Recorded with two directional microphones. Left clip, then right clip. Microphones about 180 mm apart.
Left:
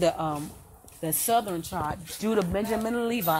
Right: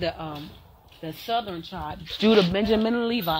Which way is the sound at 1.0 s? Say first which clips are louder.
Left 2 dB; 70° left (ahead or behind).